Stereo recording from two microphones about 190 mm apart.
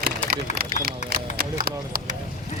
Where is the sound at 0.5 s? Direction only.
50° right (ahead or behind).